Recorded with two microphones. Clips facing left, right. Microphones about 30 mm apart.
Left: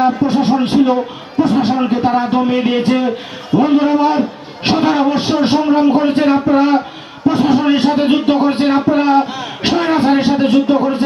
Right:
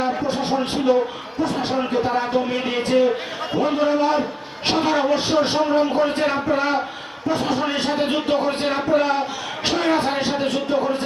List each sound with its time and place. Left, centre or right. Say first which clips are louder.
0.0 s music: left 9 dB; centre
1.4 s a sound: left 10 dB; centre
1.8 s a man's voice: left 7 dB; left